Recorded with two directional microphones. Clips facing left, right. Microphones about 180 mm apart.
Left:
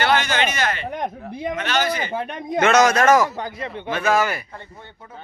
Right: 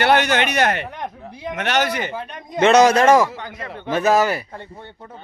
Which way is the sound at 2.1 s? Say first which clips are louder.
Left 5 dB; 55° left (ahead or behind).